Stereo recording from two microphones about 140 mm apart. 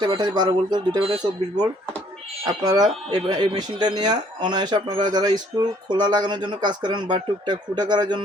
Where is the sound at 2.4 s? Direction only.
30° right (ahead or behind).